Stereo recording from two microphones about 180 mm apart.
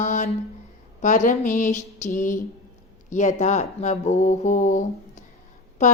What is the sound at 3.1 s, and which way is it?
A woman's voice, 40° left (ahead or behind).